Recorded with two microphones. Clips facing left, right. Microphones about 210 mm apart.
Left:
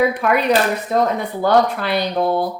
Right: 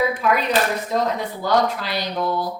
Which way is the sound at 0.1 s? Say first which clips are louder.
Left 4 dB; 60° left (ahead or behind).